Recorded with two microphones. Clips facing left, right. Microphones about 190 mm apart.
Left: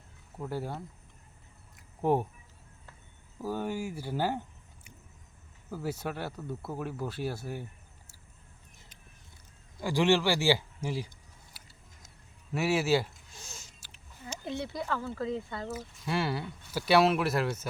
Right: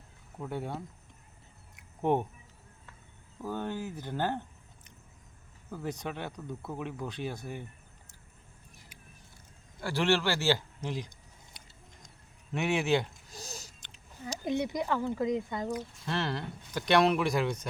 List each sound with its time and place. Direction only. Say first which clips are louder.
0.3 s speech: even; centre (ahead or behind)
1.7 s a sound: left 1 dB; 5° left (ahead or behind)
3.4 s speech: left 2 dB; 10° left (ahead or behind)
9.8 s speech: left 2 dB; 15° left (ahead or behind)
11.6 s a sound: right 1 dB; 5° left (ahead or behind)
12.5 s speech: left 1 dB; 5° left (ahead or behind)
13.3 s speech: right 6 dB; 35° right (ahead or behind)
14.4 s speech: right 5 dB; 15° right (ahead or behind)
15.7 s speech: left 1 dB; 10° left (ahead or behind)